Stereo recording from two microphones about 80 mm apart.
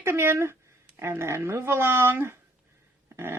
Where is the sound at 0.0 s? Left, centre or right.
Right.